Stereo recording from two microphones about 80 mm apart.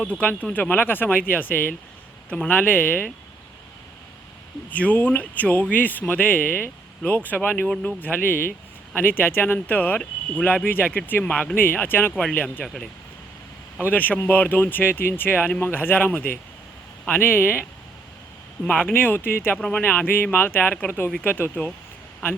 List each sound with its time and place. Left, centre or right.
0.2 s speech: centre
4.7 s speech: centre
12.6 s speech: centre
13.9 s speech: left
18.6 s speech: centre
19.5 s speech: centre